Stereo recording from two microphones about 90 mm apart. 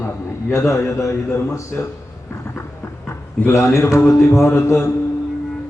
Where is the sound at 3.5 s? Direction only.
30° left (ahead or behind).